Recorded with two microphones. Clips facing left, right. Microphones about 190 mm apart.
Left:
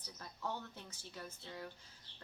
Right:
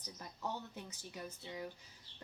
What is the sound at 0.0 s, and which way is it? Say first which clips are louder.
A woman's voice: right 1 dB; 15° right (ahead or behind).